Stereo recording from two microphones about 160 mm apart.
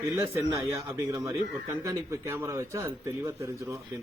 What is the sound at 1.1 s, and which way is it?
Speech, 20° right (ahead or behind).